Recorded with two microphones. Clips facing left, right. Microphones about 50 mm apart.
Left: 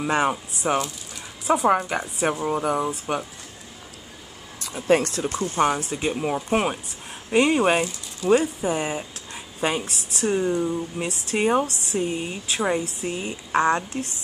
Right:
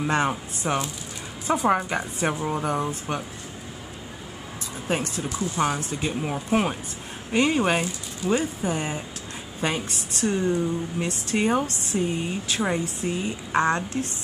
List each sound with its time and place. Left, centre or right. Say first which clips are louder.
0.0 s a woman's voice: left 1 dB; centre
4.8 s speech: left 7 dB; left
5.3 s speech: left 3 dB; left
6.0 s speech: left 3 dB; centre
13.5 s a woman's voice: left 2 dB; centre